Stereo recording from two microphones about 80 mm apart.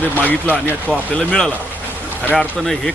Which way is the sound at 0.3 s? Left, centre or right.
Left.